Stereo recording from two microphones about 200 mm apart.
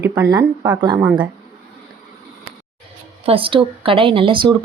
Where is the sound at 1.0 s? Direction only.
5° right (ahead or behind).